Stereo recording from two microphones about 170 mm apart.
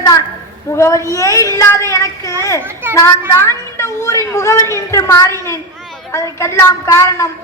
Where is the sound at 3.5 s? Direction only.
15° left (ahead or behind).